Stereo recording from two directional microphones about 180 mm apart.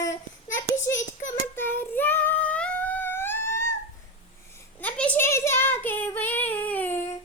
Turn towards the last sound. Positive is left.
turn(degrees=10)  # may be behind; listen again after turning